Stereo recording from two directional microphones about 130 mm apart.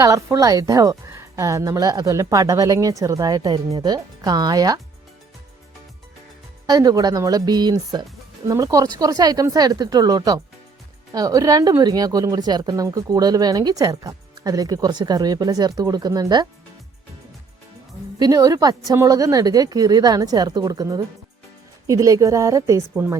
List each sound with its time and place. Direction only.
0.0 s a woman's voice: 25° right (ahead or behind)
6.7 s a woman's voice: 30° right (ahead or behind)
18.2 s a woman's voice: 25° right (ahead or behind)